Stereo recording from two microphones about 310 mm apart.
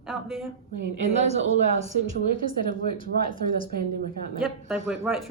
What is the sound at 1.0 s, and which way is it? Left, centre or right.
Speech, right.